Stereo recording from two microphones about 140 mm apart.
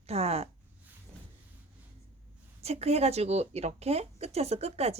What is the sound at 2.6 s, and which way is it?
Speech, 50° right (ahead or behind).